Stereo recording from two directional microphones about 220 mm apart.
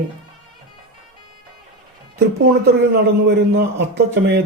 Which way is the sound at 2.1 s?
50° right (ahead or behind).